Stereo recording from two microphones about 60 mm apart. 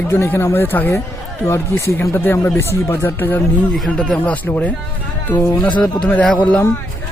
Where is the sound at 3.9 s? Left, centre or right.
Centre.